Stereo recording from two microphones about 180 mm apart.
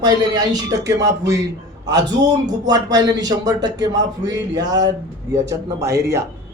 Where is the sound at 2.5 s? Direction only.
20° right (ahead or behind).